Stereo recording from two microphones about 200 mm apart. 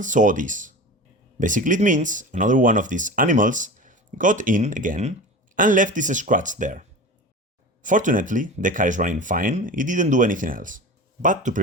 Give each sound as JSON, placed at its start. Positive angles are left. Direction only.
{"t": 0.0, "sound": "speech", "side_deg": -40}